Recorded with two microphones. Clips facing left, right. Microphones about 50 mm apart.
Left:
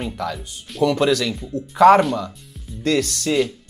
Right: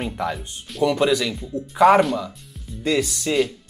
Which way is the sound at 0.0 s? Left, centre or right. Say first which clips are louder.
Right 1 dB; right.